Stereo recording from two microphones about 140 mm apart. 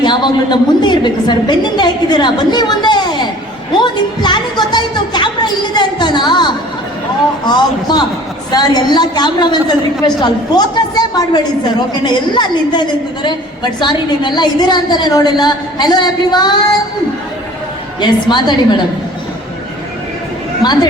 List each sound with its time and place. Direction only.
0.0 s a woman's voice: 35° left (ahead or behind)
12.0 s a woman's voice: 35° left (ahead or behind)
18.0 s a woman's voice: 30° left (ahead or behind)
20.6 s a woman's voice: 30° left (ahead or behind)